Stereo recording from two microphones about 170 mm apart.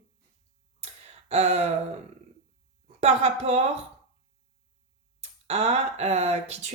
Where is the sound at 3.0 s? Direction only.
40° right (ahead or behind).